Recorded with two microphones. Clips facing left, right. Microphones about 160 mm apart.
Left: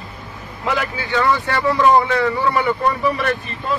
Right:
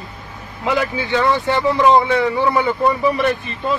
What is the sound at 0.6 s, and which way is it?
Speech, 20° right (ahead or behind).